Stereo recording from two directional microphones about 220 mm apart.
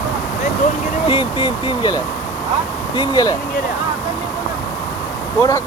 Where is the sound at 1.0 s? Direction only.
20° left (ahead or behind).